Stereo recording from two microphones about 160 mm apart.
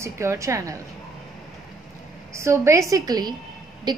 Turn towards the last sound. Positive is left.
turn(degrees=-25)  # may be behind; listen again after turning